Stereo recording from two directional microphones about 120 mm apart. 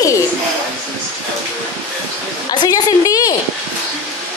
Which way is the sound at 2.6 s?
30° left (ahead or behind).